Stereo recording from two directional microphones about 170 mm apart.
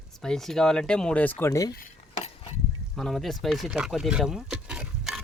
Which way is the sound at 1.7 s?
55° left (ahead or behind).